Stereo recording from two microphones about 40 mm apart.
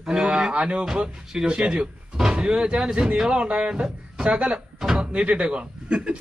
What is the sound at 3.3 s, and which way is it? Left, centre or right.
Speech, right.